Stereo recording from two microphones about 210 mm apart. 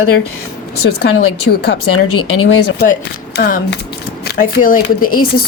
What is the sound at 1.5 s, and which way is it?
Speech, 50° left (ahead or behind).